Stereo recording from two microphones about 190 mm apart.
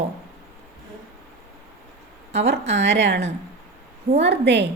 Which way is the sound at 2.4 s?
65° right (ahead or behind).